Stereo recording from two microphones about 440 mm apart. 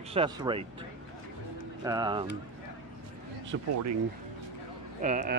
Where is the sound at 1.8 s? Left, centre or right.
Centre.